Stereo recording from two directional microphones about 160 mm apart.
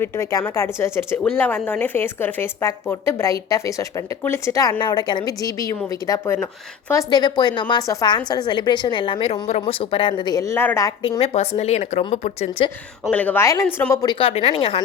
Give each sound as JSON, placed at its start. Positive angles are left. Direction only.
{"t": 0.0, "sound": "a woman's voice", "side_deg": 20}
{"t": 11.2, "sound": "a woman's voice", "side_deg": 40}
{"t": 13.1, "sound": "a woman's voice", "side_deg": 10}